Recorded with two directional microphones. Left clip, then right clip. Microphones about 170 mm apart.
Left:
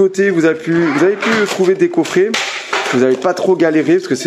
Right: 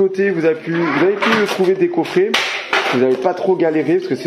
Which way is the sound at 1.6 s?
25° left (ahead or behind).